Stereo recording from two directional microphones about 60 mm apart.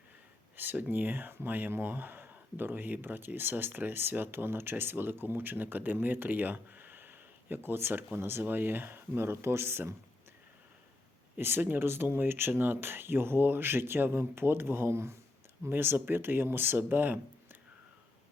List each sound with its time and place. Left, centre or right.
0.5 s speech: right
11.3 s speech: right